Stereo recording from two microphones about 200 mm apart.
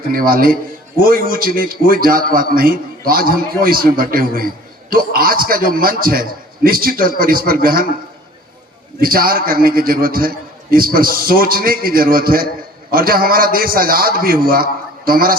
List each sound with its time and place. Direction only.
0.1 s a man's voice: 45° right (ahead or behind)
9.0 s a man's voice: 45° right (ahead or behind)